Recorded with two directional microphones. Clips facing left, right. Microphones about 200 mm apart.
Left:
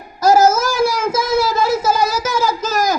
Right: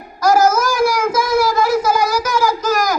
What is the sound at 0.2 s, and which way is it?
Child singing, 25° left (ahead or behind).